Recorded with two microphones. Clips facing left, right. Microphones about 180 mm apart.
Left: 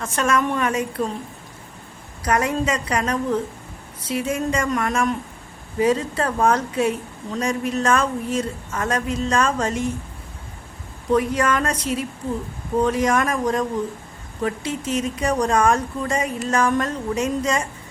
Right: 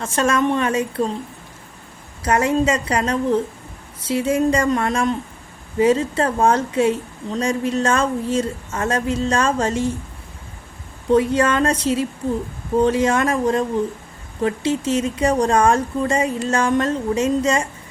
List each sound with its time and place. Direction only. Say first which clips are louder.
0.0 s a woman's voice: right 3 dB; 30° right (ahead or behind)
2.2 s a woman's voice: right 4 dB; 25° right (ahead or behind)
11.1 s a woman's voice: right 3 dB; 30° right (ahead or behind)